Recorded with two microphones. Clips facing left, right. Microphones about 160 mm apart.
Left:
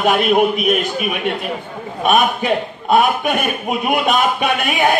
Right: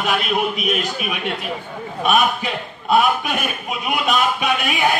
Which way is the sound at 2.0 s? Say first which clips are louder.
Left 4 dB; 50° left (ahead or behind).